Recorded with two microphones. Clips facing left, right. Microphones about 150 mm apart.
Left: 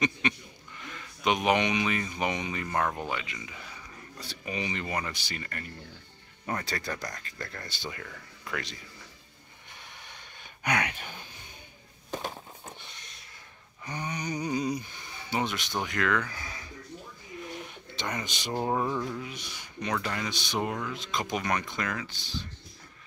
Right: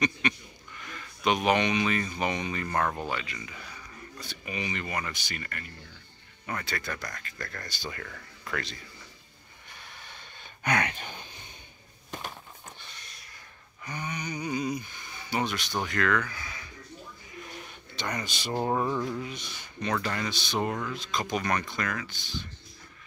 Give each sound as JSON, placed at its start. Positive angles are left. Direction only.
{"t": 0.2, "sound": "speech", "side_deg": 25}
{"t": 4.2, "sound": "speech", "side_deg": 35}
{"t": 6.9, "sound": "speech", "side_deg": 15}
{"t": 7.9, "sound": "speech", "side_deg": 10}
{"t": 9.7, "sound": "a sound", "side_deg": 20}
{"t": 12.1, "sound": "a sound", "side_deg": 25}
{"t": 13.8, "sound": "speech", "side_deg": 35}
{"t": 16.3, "sound": "speech", "side_deg": 35}
{"t": 17.5, "sound": "a sound", "side_deg": 25}
{"t": 18.2, "sound": "speech", "side_deg": 20}
{"t": 18.5, "sound": "a sound", "side_deg": 5}
{"t": 19.3, "sound": "speech", "side_deg": 10}
{"t": 20.9, "sound": "speech", "side_deg": 20}